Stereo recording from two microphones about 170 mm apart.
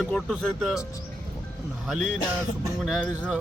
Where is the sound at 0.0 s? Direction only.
5° left (ahead or behind).